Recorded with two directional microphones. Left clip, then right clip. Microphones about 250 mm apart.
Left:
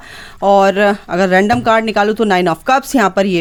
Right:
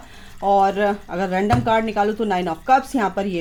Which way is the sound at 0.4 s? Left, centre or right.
Left.